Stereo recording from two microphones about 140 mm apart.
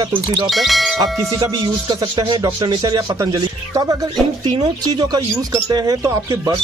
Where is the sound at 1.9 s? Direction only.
35° right (ahead or behind).